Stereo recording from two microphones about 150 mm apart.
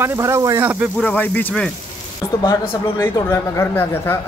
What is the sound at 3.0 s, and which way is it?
Speech, 15° left (ahead or behind).